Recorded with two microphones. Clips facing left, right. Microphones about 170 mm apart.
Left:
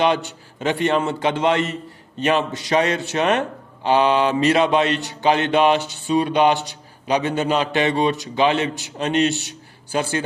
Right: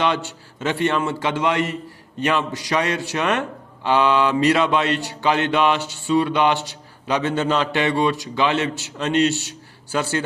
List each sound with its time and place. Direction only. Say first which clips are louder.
0.0 s mantra: left 3 dB; 15° left (ahead or behind)